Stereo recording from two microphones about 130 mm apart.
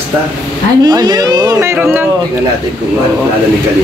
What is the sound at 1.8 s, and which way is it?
Speech, 15° right (ahead or behind).